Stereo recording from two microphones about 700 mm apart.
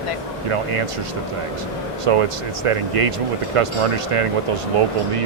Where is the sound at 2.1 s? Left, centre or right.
Right.